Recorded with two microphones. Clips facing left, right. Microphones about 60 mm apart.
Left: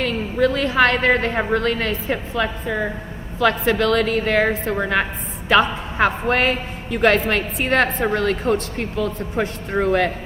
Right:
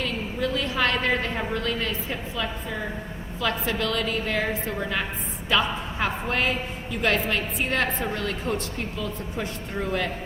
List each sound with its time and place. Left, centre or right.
0.0 s a woman's voice: left